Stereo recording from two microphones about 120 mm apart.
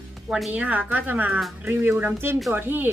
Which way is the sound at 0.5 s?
10° right (ahead or behind).